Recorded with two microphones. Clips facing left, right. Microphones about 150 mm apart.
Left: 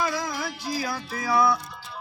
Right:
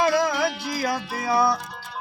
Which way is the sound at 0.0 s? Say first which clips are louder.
Right 7 dB; 70° right (ahead or behind).